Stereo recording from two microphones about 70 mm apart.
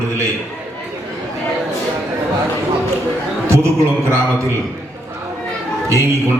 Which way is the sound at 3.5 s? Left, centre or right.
Right.